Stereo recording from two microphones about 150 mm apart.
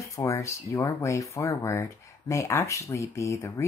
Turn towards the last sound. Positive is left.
turn(degrees=20)  # may be behind; listen again after turning